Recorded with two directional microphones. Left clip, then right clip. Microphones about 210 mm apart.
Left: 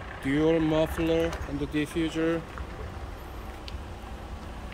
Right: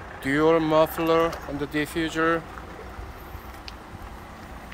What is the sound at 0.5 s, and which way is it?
Speech, centre (ahead or behind).